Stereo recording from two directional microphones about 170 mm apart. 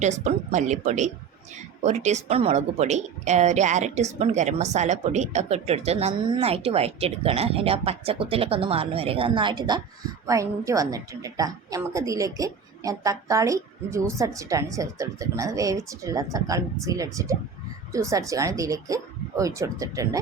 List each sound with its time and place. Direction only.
0.0 s a woman's voice: 45° right (ahead or behind); by 20.1 s 20° right (ahead or behind)